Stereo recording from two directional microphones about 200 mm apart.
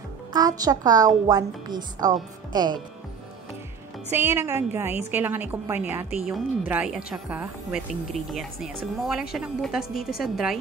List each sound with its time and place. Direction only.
0.3 s a woman's voice: 20° right (ahead or behind)
4.1 s a woman's voice: 10° right (ahead or behind)